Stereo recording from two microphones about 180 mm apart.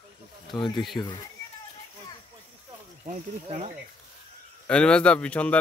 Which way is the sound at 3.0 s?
35° right (ahead or behind).